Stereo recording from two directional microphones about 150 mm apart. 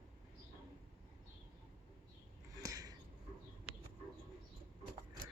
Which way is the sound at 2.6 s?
25° right (ahead or behind).